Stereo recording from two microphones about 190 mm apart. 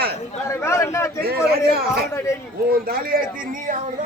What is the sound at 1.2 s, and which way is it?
Speech, 55° right (ahead or behind).